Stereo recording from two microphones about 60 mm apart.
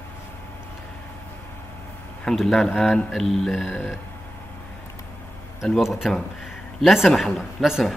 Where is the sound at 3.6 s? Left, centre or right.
Centre.